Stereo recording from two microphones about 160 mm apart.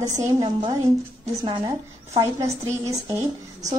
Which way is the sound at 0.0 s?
25° right (ahead or behind).